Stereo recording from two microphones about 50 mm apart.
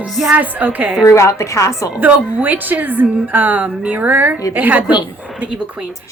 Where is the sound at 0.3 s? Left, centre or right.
Right.